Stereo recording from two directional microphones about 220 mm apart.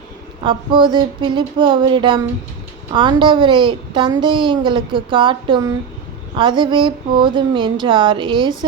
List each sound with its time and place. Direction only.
0.4 s a woman's voice: 20° right (ahead or behind)